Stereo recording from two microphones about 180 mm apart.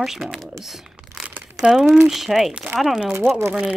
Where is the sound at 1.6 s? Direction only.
5° right (ahead or behind).